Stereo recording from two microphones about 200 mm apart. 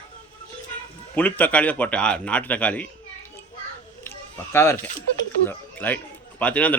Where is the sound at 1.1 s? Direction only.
10° left (ahead or behind).